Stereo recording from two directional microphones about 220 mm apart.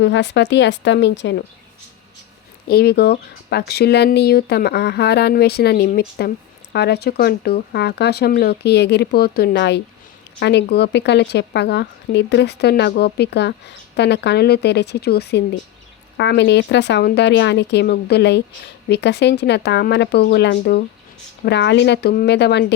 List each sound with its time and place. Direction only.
0.0 s speech: 55° left (ahead or behind)
2.6 s speech: 45° left (ahead or behind)